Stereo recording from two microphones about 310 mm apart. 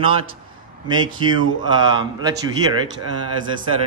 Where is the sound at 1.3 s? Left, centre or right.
Centre.